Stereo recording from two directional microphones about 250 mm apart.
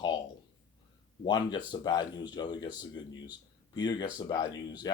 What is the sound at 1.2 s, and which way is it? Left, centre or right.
Speech, centre.